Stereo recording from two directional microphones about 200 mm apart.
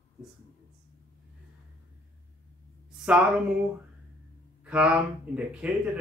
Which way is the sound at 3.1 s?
5° right (ahead or behind).